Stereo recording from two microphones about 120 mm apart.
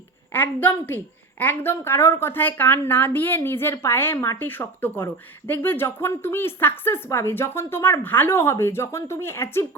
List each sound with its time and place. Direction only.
0.3 s a woman's voice: 15° left (ahead or behind)